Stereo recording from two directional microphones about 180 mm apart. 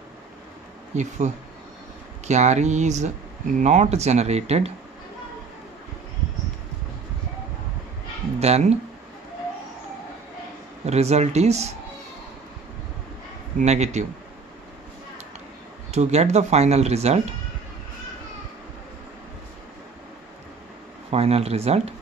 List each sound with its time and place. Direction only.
0.9 s speech: 40° right (ahead or behind)
8.4 s speech: 35° right (ahead or behind)
10.9 s speech: 35° right (ahead or behind)
13.6 s speech: 40° right (ahead or behind)
15.9 s speech: 40° right (ahead or behind)
21.1 s speech: 35° right (ahead or behind)